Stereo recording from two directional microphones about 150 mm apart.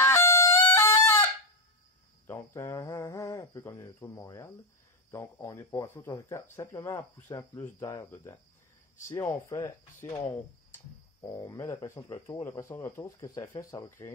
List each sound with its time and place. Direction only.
0.0 s music: 20° left (ahead or behind)
2.2 s cricket: 20° left (ahead or behind)
5.1 s speech: 20° left (ahead or behind)